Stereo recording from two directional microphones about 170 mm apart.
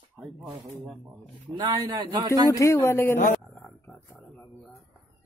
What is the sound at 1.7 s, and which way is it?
Speech, 25° right (ahead or behind).